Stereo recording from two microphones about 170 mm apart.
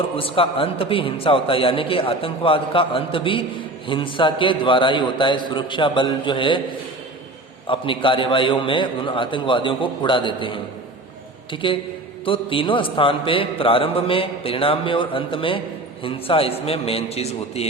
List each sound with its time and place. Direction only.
0.2 s a man's voice: 30° left (ahead or behind)
7.7 s a man's voice: 30° left (ahead or behind)